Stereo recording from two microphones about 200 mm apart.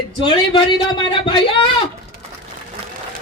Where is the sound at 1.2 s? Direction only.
25° left (ahead or behind).